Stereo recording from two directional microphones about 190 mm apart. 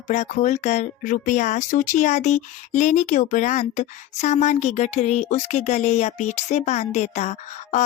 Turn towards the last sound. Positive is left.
turn(degrees=35)  # may be behind; listen again after turning